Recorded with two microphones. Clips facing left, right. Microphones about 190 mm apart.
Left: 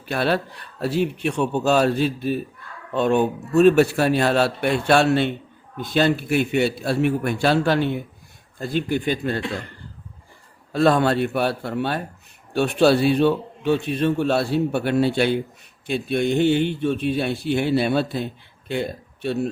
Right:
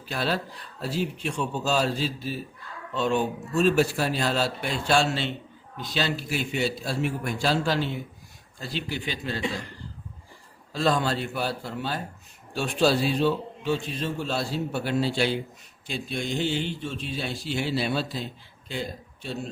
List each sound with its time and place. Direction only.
0.0 s a man's voice: 60° left (ahead or behind)
10.7 s a man's voice: 60° left (ahead or behind)